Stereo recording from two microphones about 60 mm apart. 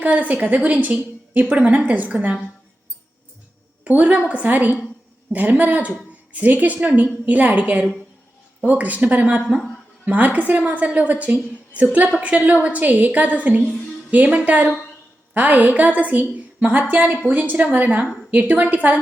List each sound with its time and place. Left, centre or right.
0.0 s a woman's voice: right
3.8 s a woman's voice: right
8.6 s a woman's voice: right